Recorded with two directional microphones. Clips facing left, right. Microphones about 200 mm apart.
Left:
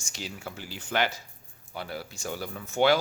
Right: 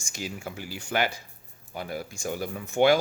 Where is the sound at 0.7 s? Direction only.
10° right (ahead or behind).